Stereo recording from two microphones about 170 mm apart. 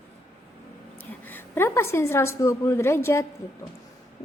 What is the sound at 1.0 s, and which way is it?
A woman's voice, 10° left (ahead or behind).